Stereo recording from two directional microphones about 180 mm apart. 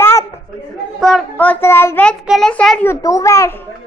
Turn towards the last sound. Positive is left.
turn(degrees=15)  # may be behind; listen again after turning